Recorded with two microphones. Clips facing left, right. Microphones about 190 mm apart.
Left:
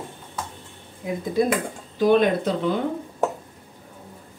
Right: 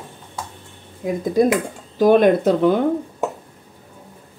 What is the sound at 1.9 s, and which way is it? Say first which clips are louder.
Speech: right 5 dB; 50° right (ahead or behind).